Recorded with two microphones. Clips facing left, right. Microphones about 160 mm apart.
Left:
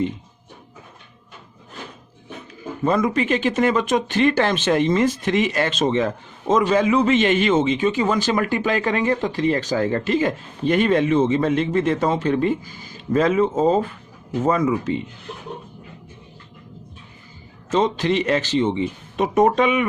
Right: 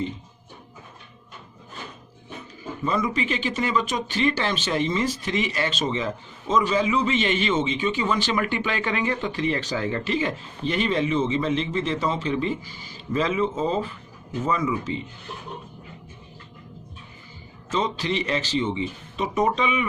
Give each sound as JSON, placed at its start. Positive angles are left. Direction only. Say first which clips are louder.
{"t": 2.8, "sound": "speech", "louder": "left 6 dB", "side_deg": 50}
{"t": 17.7, "sound": "speech", "louder": "left 6 dB", "side_deg": 50}